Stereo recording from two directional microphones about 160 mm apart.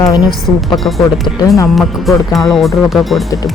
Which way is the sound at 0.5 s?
10° left (ahead or behind).